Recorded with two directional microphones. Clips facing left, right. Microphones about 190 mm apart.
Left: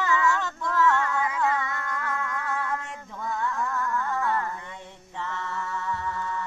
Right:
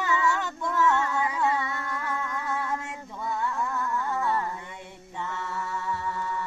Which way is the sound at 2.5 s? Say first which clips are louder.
Even; 15° right (ahead or behind).